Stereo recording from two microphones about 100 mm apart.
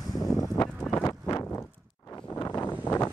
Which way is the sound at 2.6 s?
15° left (ahead or behind).